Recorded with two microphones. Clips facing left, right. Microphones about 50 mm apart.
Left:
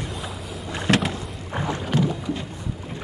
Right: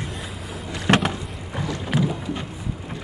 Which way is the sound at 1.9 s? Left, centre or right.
Centre.